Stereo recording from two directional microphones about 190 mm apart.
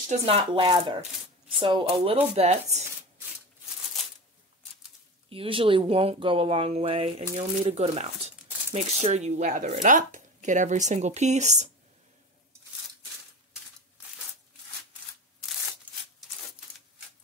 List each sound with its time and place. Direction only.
0.2 s speech: 30° right (ahead or behind)
5.3 s speech: 30° right (ahead or behind)